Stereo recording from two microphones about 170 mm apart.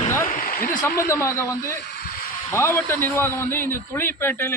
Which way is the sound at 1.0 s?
15° left (ahead or behind).